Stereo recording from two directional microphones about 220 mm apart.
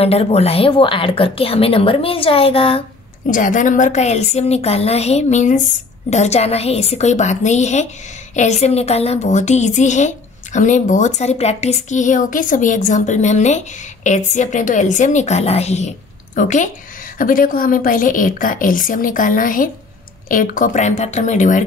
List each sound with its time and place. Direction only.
0.0 s a woman's voice: 25° left (ahead or behind)
3.3 s a woman's voice: 35° left (ahead or behind)